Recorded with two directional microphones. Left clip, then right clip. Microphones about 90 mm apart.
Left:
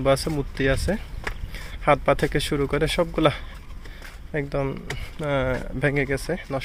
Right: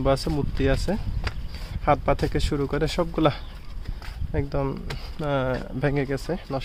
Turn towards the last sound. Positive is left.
turn(degrees=-20)  # may be behind; listen again after turning